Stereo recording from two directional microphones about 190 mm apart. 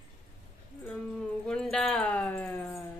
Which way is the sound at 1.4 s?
5° left (ahead or behind).